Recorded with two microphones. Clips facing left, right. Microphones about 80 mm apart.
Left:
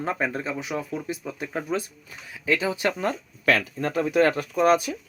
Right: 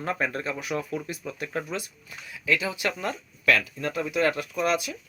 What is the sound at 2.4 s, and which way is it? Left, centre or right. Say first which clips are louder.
Speech: left 3 dB; left.